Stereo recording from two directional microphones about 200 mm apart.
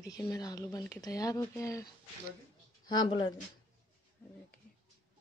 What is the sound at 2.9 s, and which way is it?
Speech, 20° left (ahead or behind).